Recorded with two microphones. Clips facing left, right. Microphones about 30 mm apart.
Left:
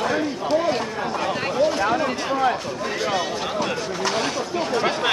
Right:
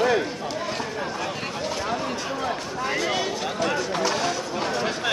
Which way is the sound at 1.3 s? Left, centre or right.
Left.